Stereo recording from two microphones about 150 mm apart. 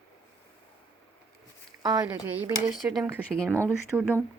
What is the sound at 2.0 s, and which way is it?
Speech, 10° right (ahead or behind).